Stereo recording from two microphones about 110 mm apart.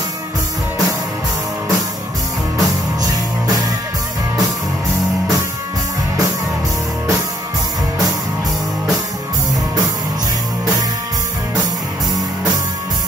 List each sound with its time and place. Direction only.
2.5 s music: 35° right (ahead or behind)